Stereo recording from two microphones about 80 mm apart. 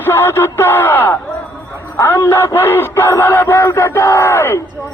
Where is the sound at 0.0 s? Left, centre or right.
Left.